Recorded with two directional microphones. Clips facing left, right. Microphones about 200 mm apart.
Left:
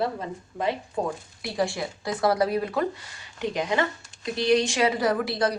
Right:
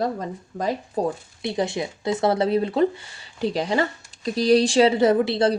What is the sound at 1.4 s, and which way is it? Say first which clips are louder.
Speech: right 3 dB; 20° right (ahead or behind).